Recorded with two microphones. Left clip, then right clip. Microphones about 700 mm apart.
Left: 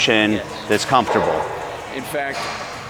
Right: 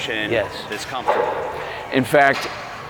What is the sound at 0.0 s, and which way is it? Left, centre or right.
Speech, left.